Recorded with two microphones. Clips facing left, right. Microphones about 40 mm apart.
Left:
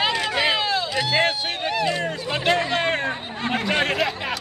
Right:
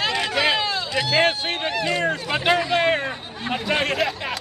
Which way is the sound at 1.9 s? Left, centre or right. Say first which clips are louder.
Right 2 dB; right.